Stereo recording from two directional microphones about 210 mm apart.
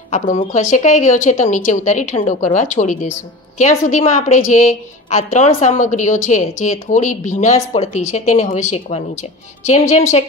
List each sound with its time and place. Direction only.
0.1 s a woman's voice: 35° left (ahead or behind)